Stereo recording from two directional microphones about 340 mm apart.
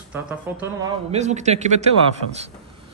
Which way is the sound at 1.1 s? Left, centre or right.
Centre.